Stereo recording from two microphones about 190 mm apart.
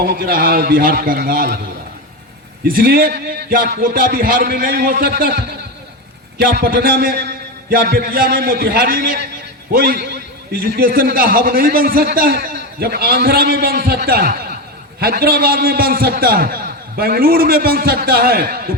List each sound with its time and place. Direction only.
0.0 s a man's voice: 50° right (ahead or behind)
2.6 s a man's voice: 50° right (ahead or behind)